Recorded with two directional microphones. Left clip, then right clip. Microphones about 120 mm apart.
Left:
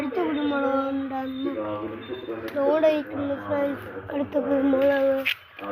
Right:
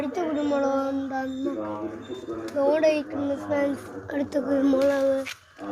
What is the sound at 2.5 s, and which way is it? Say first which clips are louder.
Speech: even; 35° right (ahead or behind).